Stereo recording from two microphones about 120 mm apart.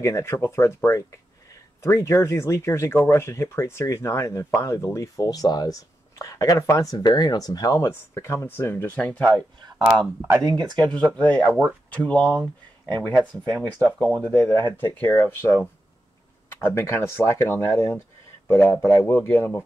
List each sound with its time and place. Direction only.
0.0 s speech: 25° left (ahead or behind)
2.0 s speech: 25° left (ahead or behind); by 9.4 s 10° left (ahead or behind)
9.6 s speech: 35° right (ahead or behind)
10.9 s speech: 10° left (ahead or behind)